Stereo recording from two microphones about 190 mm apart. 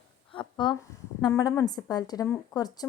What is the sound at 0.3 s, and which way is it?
A woman's voice, 25° left (ahead or behind).